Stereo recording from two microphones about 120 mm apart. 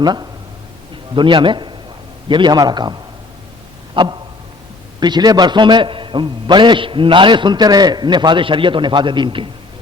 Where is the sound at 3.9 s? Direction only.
40° right (ahead or behind).